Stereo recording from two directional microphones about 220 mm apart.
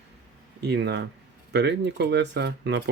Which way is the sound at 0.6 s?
50° right (ahead or behind).